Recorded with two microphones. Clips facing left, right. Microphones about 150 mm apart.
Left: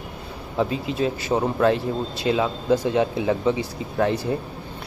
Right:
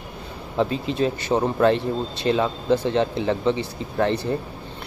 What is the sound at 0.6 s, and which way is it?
Speech, 5° left (ahead or behind).